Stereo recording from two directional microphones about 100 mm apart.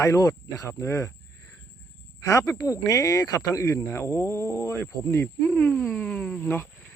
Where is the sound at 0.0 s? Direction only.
35° left (ahead or behind).